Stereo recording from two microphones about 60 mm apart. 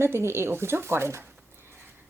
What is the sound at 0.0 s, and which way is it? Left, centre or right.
A woman's voice, right.